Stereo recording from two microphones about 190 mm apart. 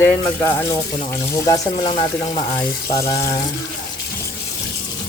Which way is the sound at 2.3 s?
20° left (ahead or behind).